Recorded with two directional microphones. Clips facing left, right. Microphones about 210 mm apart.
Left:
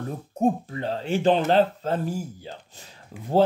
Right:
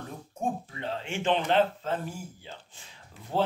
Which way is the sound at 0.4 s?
40° left (ahead or behind).